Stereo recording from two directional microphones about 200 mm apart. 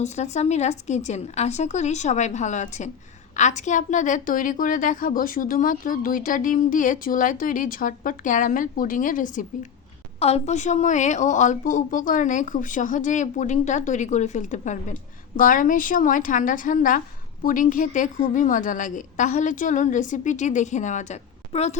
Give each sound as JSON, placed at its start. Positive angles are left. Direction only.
{"t": 0.0, "sound": "a woman's voice", "side_deg": 35}